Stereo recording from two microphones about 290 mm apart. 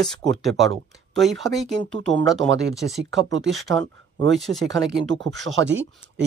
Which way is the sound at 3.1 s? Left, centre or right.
Right.